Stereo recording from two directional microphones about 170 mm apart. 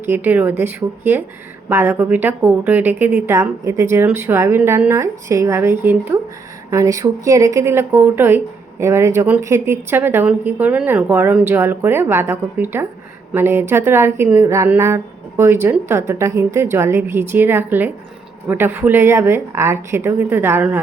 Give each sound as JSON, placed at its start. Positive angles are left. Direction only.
{"t": 0.0, "sound": "a woman's voice", "side_deg": -10}